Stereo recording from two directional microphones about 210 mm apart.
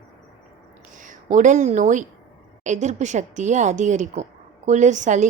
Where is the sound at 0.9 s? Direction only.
35° right (ahead or behind).